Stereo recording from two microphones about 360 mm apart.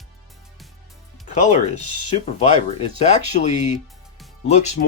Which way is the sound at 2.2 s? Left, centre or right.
Centre.